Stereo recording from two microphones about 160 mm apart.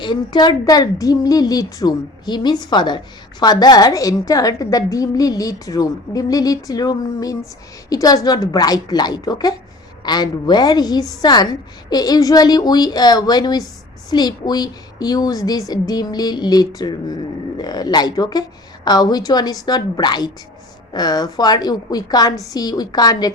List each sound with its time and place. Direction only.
0.0 s a woman's voice: 30° left (ahead or behind)